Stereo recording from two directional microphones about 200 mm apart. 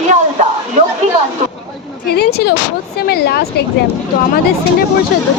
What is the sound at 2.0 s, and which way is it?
A woman's voice, 55° left (ahead or behind).